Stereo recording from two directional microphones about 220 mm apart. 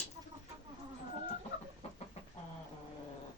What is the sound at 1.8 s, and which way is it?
Chicken, 30° left (ahead or behind).